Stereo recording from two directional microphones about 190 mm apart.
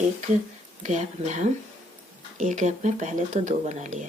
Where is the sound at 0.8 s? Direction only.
40° right (ahead or behind).